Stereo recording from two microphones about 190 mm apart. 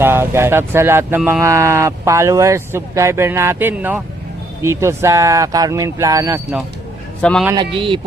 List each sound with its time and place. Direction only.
0.0 s speech: 10° right (ahead or behind)
7.2 s a man's voice: 5° left (ahead or behind)
7.5 s speech: 25° right (ahead or behind)